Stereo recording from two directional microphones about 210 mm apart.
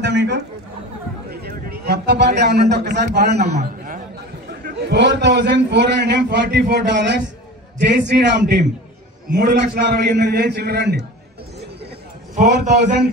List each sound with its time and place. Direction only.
0.0 s chatter: 55° right (ahead or behind)
1.3 s a man's voice: 45° right (ahead or behind)
3.5 s a sound: 40° right (ahead or behind)
4.5 s a man's voice: 50° right (ahead or behind)
12.6 s a man's voice: 35° right (ahead or behind)